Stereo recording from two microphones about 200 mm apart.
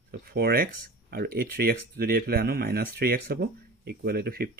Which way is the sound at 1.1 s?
50° right (ahead or behind).